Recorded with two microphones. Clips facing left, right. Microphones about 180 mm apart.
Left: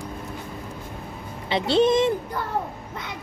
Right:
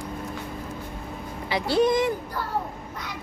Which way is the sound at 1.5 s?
25° left (ahead or behind).